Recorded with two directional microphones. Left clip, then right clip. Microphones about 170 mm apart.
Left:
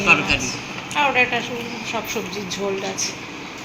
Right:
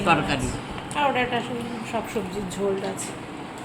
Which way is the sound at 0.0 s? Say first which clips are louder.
Left 5 dB; 35° right (ahead or behind).